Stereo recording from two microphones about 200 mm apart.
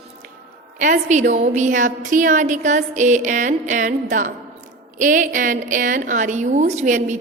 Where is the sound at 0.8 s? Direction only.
40° right (ahead or behind).